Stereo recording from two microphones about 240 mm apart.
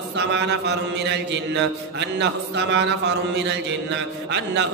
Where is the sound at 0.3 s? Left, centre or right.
Right.